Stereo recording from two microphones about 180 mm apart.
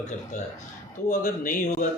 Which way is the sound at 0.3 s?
40° left (ahead or behind).